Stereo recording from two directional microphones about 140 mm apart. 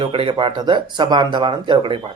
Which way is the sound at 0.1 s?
40° right (ahead or behind).